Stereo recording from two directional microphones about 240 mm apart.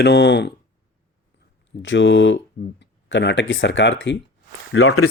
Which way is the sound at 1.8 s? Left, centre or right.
Left.